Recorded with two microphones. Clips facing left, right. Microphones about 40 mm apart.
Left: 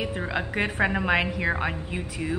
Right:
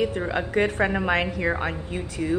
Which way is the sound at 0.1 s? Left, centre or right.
Centre.